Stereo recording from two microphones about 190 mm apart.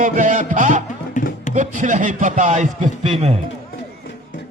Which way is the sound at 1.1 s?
40° left (ahead or behind).